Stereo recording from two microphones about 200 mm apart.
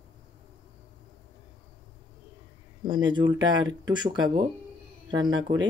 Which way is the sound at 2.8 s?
25° right (ahead or behind).